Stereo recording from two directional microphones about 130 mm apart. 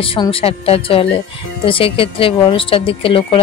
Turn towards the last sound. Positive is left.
turn(degrees=40)  # may be behind; listen again after turning